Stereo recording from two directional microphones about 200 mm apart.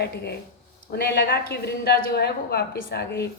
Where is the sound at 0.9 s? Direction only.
55° left (ahead or behind).